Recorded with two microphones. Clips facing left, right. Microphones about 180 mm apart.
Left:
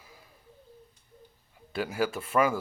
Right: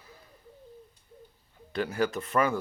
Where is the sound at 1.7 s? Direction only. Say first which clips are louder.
Right 1 dB; 5° left (ahead or behind).